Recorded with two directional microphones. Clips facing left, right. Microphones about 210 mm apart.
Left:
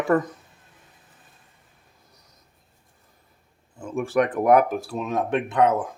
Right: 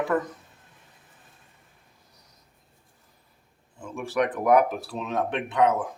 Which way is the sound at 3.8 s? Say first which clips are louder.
Left 4 dB; 50° left (ahead or behind).